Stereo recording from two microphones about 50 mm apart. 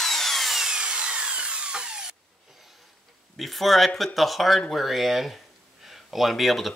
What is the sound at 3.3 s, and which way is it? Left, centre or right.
Speech, centre.